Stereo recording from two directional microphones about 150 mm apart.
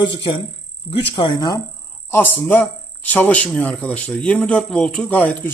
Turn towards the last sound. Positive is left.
turn(degrees=10)  # may be behind; listen again after turning